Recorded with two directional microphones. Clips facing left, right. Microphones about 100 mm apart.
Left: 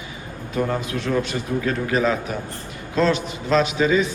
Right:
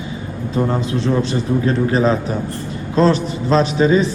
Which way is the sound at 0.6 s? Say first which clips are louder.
Right 4 dB; 25° right (ahead or behind).